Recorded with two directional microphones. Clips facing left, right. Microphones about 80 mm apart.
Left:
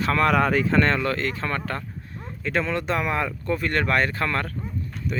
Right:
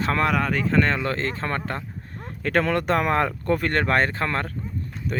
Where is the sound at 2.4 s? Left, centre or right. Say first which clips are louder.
Right 3 dB; right.